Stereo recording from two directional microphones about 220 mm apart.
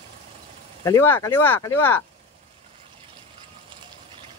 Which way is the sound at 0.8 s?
15° left (ahead or behind).